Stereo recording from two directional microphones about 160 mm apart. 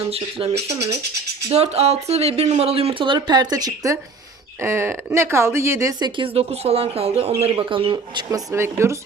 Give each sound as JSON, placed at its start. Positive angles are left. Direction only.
{"t": 0.1, "sound": "a woman's voice", "side_deg": -40}
{"t": 6.1, "sound": "speech", "side_deg": -35}
{"t": 8.5, "sound": "a woman's voice", "side_deg": -15}